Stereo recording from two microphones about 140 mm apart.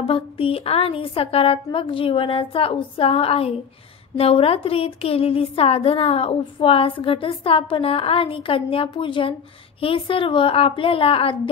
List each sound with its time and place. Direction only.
0.0 s a woman's voice: 40° left (ahead or behind)